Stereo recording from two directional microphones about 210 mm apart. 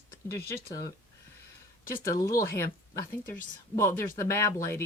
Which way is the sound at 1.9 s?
10° left (ahead or behind).